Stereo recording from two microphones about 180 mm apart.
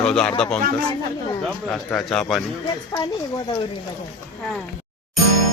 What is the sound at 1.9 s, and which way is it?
Speech, 5° left (ahead or behind).